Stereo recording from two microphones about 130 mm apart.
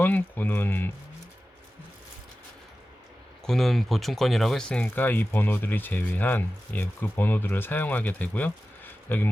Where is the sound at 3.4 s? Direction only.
5° left (ahead or behind).